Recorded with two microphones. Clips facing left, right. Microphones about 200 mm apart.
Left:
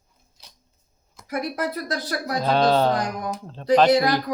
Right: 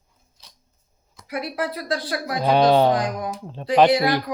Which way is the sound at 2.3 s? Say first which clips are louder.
Right 3 dB; 15° right (ahead or behind).